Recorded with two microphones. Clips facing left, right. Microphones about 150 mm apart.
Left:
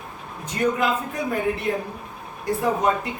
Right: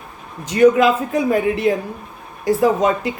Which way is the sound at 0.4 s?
90° right.